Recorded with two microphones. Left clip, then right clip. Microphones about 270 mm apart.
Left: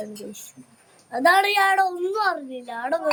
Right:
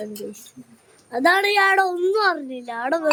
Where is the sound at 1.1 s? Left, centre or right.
Centre.